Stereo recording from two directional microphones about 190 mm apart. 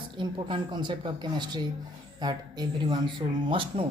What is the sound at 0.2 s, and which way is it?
Speech, 25° right (ahead or behind).